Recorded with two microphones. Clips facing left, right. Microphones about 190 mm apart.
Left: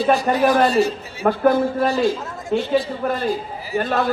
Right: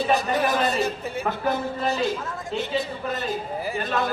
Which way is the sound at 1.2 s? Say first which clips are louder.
Left 10 dB; 55° left (ahead or behind).